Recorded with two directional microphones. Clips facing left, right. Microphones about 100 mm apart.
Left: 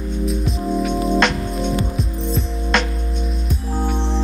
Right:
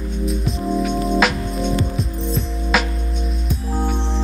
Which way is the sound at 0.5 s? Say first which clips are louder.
Right 2 dB; centre (ahead or behind).